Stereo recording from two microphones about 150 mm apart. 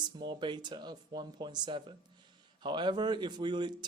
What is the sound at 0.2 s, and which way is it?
Speech, 30° right (ahead or behind).